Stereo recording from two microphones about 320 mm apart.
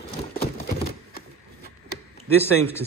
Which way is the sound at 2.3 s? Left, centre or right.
Centre.